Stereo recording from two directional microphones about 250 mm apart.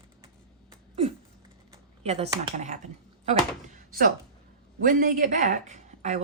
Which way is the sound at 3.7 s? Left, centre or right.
Right.